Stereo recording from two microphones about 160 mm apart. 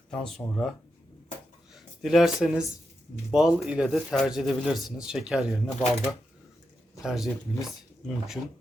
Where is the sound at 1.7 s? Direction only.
Centre (ahead or behind).